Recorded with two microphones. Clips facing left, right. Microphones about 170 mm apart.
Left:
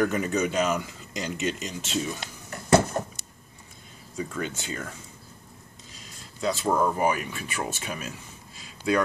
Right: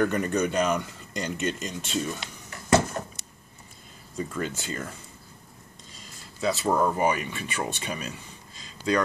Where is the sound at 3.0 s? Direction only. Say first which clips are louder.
Left 4 dB; 35° left (ahead or behind).